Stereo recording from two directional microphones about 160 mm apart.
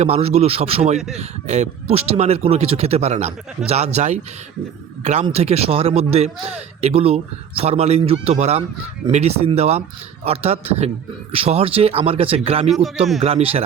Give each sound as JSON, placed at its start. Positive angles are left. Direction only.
{"t": 0.0, "sound": "speech", "side_deg": -40}
{"t": 0.9, "sound": "speech", "side_deg": 0}
{"t": 1.2, "sound": "speech", "side_deg": -45}
{"t": 5.2, "sound": "speech", "side_deg": -40}
{"t": 12.6, "sound": "speech", "side_deg": 0}
{"t": 13.2, "sound": "speech", "side_deg": -40}